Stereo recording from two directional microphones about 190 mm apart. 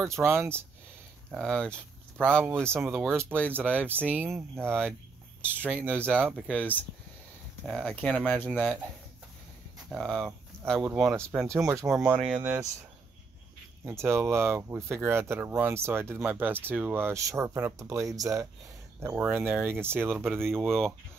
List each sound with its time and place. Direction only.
0.0 s speech: 15° right (ahead or behind)
1.3 s speech: centre (ahead or behind)
2.6 s speech: 10° right (ahead or behind)
6.3 s speech: 5° left (ahead or behind)
9.8 s speech: 5° right (ahead or behind)
11.9 s speech: 5° right (ahead or behind)
13.8 s speech: 15° right (ahead or behind)
20.6 s speech: centre (ahead or behind)